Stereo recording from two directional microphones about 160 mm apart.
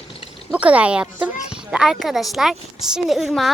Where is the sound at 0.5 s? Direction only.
10° right (ahead or behind).